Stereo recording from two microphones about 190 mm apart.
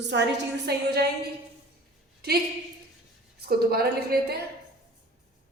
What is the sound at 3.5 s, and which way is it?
Speech, 55° right (ahead or behind).